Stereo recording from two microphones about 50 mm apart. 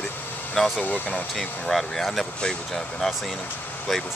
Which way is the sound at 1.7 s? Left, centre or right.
Centre.